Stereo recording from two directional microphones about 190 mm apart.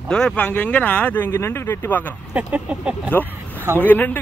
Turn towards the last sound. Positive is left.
turn(degrees=10)  # may be behind; listen again after turning